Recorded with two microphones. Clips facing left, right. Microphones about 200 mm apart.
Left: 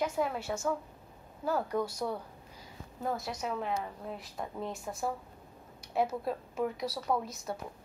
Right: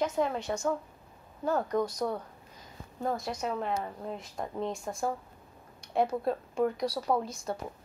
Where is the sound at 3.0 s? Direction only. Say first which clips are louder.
Right 3 dB; 5° left (ahead or behind).